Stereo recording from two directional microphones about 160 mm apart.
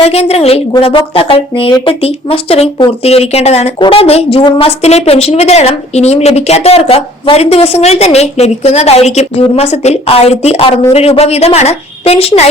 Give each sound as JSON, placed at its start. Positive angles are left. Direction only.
{"t": 0.0, "sound": "speech", "side_deg": 40}